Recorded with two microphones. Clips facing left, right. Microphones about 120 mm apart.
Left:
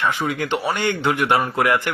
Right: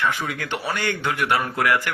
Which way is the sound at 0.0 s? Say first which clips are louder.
Left 3 dB; 20° left (ahead or behind).